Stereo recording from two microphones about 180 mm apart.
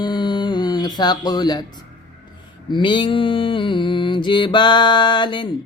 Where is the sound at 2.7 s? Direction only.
25° left (ahead or behind).